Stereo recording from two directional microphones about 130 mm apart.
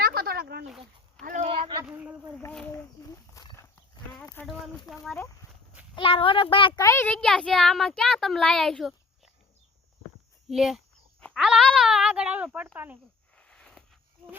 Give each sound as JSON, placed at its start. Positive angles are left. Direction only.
{"t": 1.2, "sound": "speech", "side_deg": -90}
{"t": 1.5, "sound": "a sound", "side_deg": -45}
{"t": 1.8, "sound": "speech", "side_deg": -10}
{"t": 2.5, "sound": "speech", "side_deg": 5}
{"t": 3.0, "sound": "walk", "side_deg": 25}
{"t": 4.4, "sound": "speech", "side_deg": 15}
{"t": 6.0, "sound": "a child's voice", "side_deg": 45}
{"t": 6.8, "sound": "a child's voice", "side_deg": 15}
{"t": 10.5, "sound": "a child's voice", "side_deg": -5}
{"t": 13.3, "sound": "a sound", "side_deg": 5}